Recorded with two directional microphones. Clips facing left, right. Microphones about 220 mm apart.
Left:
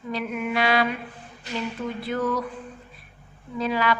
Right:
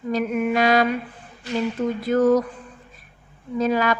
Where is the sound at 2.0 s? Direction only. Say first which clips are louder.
Right 9 dB; 45° right (ahead or behind).